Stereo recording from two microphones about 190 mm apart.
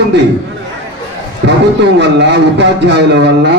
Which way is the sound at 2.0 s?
65° right (ahead or behind).